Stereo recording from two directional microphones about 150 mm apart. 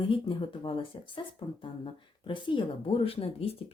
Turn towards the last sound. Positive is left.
turn(degrees=40)  # may be behind; listen again after turning